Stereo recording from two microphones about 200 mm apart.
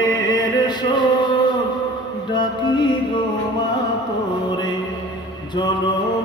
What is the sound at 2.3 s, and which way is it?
Music, 25° left (ahead or behind).